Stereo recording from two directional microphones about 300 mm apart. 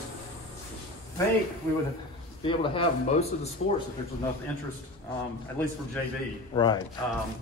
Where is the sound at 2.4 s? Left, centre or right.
Centre.